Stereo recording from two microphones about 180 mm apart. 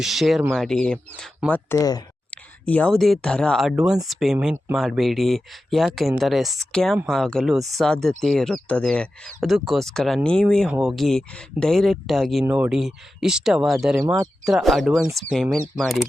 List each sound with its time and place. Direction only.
0.0 s speech: centre (ahead or behind)
1.8 s speech: 20° left (ahead or behind)
2.3 s speech: 10° left (ahead or behind)